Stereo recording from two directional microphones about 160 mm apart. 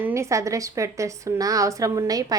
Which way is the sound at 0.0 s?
20° right (ahead or behind).